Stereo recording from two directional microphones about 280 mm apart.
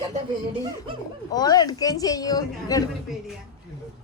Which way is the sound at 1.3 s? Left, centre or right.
Centre.